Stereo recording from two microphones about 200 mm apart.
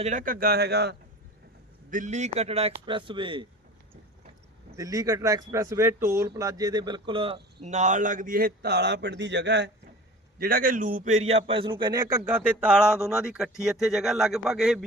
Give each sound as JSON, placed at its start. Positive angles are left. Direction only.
{"t": 0.0, "sound": "a man's voice", "side_deg": -40}
{"t": 1.9, "sound": "a man's voice", "side_deg": -35}
{"t": 4.8, "sound": "speech", "side_deg": -15}
{"t": 10.3, "sound": "speech", "side_deg": -45}